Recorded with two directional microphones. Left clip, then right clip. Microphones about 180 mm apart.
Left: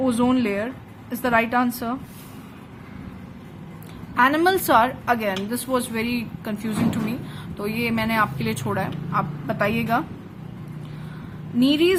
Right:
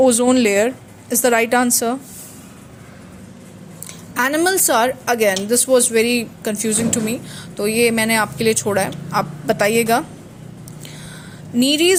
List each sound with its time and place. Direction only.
0.0 s a woman's voice: 35° right (ahead or behind)
4.1 s a woman's voice: 35° right (ahead or behind)
11.6 s a woman's voice: 35° right (ahead or behind)